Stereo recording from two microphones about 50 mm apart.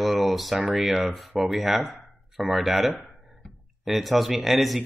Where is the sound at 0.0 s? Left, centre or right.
Centre.